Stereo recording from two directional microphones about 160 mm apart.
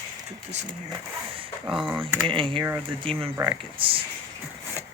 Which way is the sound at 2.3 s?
35° right (ahead or behind).